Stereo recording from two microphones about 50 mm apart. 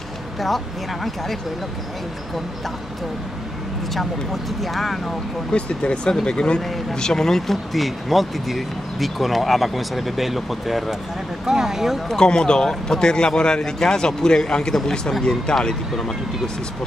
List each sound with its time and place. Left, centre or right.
1.0 s speech: centre
3.9 s speech: centre
5.5 s a man's voice: centre
12.1 s a man's voice: centre